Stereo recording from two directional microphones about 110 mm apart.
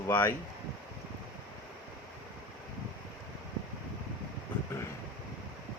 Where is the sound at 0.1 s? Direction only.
20° left (ahead or behind).